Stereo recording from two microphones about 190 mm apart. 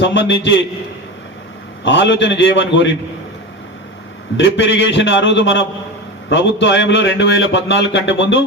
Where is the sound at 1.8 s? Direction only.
75° left (ahead or behind).